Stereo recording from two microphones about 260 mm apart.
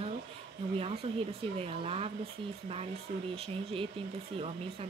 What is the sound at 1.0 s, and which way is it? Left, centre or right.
Speech, right.